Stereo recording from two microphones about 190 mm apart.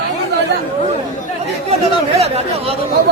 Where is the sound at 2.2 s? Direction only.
35° right (ahead or behind).